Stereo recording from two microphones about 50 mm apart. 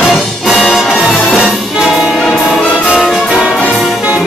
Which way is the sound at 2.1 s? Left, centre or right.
Centre.